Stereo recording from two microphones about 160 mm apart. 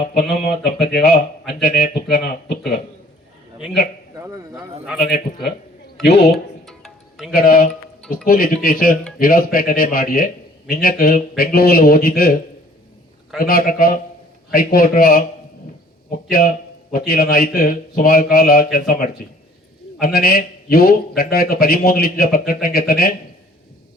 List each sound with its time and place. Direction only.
0.1 s speech: 90° left
2.0 s speech: 80° left
6.0 s speech: 90° left
6.3 s music: centre (ahead or behind)
7.4 s a man's voice: 70° left (ahead or behind)
13.4 s a man's voice: 65° left (ahead or behind)